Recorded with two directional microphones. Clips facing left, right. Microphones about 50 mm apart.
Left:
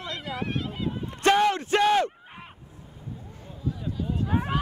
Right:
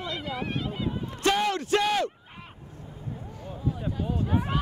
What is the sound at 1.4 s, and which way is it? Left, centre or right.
Speech, left.